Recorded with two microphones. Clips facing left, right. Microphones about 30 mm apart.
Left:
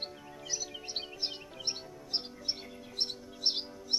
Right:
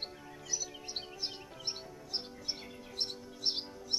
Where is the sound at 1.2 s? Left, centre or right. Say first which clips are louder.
Left 3 dB; left.